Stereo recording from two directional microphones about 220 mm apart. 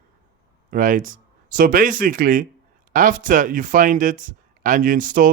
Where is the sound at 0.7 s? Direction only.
35° right (ahead or behind).